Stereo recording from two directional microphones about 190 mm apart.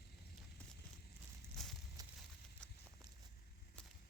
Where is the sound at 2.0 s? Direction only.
20° right (ahead or behind).